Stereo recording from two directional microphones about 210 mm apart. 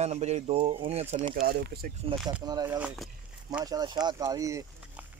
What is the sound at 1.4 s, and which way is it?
Speech, 45° right (ahead or behind).